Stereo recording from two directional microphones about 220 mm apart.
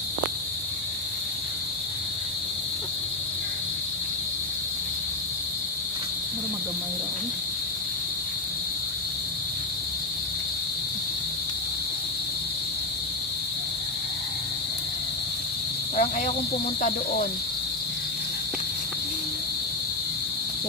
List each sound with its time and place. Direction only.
16.0 s cricket: 30° left (ahead or behind)